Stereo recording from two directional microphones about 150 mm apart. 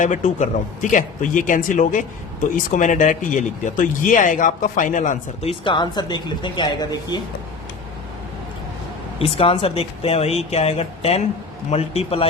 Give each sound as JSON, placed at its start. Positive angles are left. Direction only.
{"t": 0.0, "sound": "speech", "side_deg": 55}
{"t": 9.1, "sound": "speech", "side_deg": 40}